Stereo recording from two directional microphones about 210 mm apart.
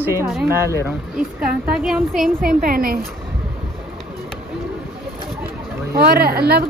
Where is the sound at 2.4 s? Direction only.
45° right (ahead or behind).